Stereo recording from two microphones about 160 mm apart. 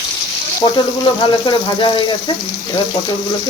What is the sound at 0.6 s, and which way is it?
Speech, 25° left (ahead or behind).